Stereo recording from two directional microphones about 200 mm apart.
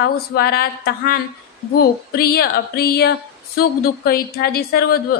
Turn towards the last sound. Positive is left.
turn(degrees=50)  # may be behind; listen again after turning